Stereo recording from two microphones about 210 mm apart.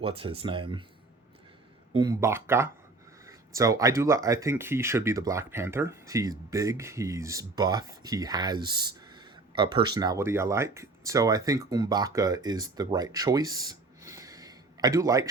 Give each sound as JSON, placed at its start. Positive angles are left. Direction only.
{"t": 0.2, "sound": "speech", "side_deg": -25}
{"t": 1.9, "sound": "speech", "side_deg": -20}